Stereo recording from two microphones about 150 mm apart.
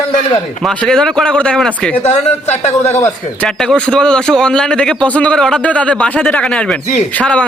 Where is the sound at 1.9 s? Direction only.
50° left (ahead or behind).